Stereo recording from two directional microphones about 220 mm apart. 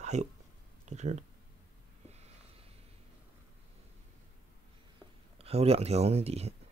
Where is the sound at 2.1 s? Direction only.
30° right (ahead or behind).